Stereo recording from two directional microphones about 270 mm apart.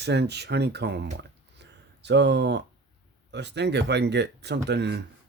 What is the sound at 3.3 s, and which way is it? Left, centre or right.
Speech, right.